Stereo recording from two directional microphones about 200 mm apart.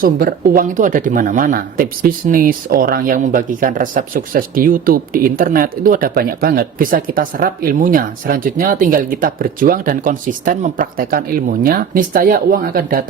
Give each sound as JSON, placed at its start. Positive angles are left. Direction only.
{"t": 0.0, "sound": "speech", "side_deg": -45}